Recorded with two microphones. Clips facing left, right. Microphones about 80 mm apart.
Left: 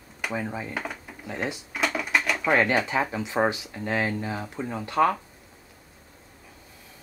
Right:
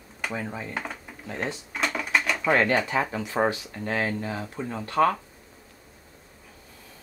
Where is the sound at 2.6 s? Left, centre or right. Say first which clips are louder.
Even; centre.